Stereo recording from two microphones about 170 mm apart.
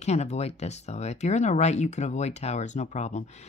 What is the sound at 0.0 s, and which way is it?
Speech, 40° left (ahead or behind).